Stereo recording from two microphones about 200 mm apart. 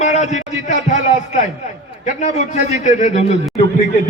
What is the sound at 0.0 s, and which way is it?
A man's voice, 35° left (ahead or behind).